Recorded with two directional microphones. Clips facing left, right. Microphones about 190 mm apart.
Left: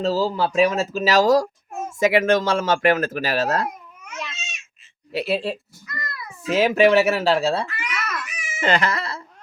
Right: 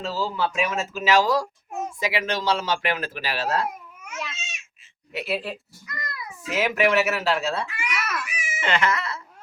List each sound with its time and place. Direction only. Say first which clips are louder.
0.0 s speech: left 6 dB; 40° left (ahead or behind)
3.7 s babbling: even; 5° right (ahead or behind)
5.1 s speech: left 5 dB; 30° left (ahead or behind)
5.8 s cat: left 1 dB; 15° right (ahead or behind)
6.5 s speech: left 6 dB; 30° left (ahead or behind)
7.7 s cat: even; 10° right (ahead or behind)
8.5 s a sound: left 3 dB; 35° left (ahead or behind)